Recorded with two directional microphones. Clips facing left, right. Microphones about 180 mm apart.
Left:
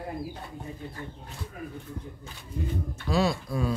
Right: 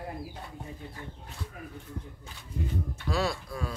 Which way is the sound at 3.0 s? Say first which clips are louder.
Left 5 dB; 15° left (ahead or behind).